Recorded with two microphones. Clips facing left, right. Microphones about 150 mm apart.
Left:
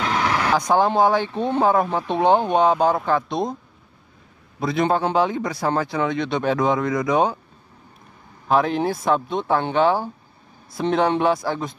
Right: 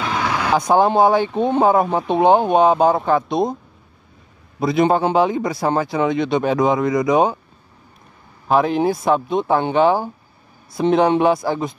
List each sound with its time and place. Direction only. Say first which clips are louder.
0.0 s vehicle: even; 10° right (ahead or behind)
0.7 s a man's voice: right 4 dB; 20° right (ahead or behind)
4.6 s a man's voice: right 4 dB; 10° right (ahead or behind)
8.5 s a man's voice: right 3 dB; 5° right (ahead or behind)